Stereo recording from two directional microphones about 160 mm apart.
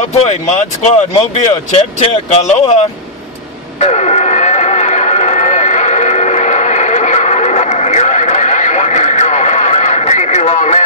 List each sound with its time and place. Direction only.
0.3 s speech: 45° left (ahead or behind)
3.8 s radio: 45° left (ahead or behind)